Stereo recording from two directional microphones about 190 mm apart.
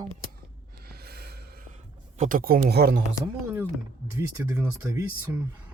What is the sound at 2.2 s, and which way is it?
Speech, 45° right (ahead or behind).